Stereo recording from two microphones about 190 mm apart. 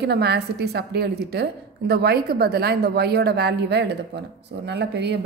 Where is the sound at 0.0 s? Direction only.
60° right (ahead or behind).